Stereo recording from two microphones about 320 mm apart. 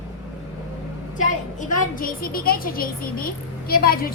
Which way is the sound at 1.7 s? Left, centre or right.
Left.